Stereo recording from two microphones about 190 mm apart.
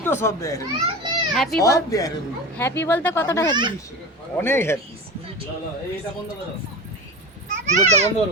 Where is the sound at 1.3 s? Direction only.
Centre (ahead or behind).